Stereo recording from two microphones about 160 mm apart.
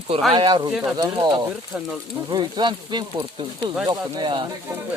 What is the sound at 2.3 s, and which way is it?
Speech, 30° right (ahead or behind).